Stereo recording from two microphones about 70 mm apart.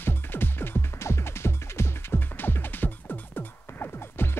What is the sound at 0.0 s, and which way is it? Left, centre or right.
Music, left.